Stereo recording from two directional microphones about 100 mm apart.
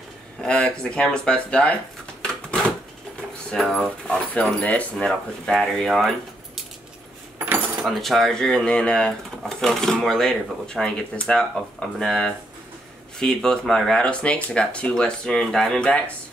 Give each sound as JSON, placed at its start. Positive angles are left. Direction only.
{"t": 0.4, "sound": "speech", "side_deg": 10}
{"t": 3.5, "sound": "speech", "side_deg": 5}
{"t": 7.3, "sound": "keys jangling", "side_deg": -20}
{"t": 7.8, "sound": "speech", "side_deg": 0}